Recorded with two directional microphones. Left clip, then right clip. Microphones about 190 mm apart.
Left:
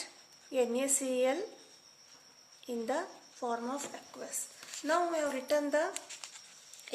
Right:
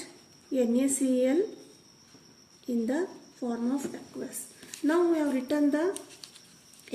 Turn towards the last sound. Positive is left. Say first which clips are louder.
# right 3 dB
turn(degrees=20)  # may be behind; listen again after turning